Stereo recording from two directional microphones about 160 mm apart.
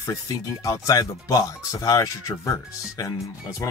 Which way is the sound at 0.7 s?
20° left (ahead or behind).